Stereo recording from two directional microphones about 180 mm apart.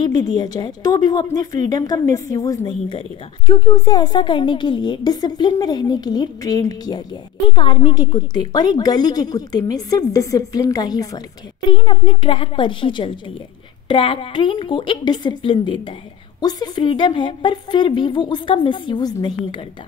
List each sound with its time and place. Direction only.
0.0 s a woman's voice: 20° left (ahead or behind)